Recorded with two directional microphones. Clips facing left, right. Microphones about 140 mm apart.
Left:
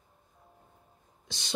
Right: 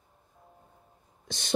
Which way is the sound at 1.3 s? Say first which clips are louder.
Right 5 dB; 50° right (ahead or behind).